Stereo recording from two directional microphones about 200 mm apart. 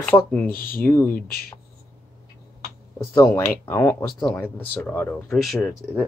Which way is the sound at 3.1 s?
15° left (ahead or behind).